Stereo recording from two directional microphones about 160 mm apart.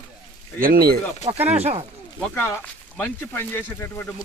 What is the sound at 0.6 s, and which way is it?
Speech, 70° right (ahead or behind).